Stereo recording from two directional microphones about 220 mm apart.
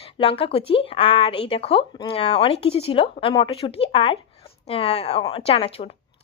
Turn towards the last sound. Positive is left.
turn(degrees=25)  # may be behind; listen again after turning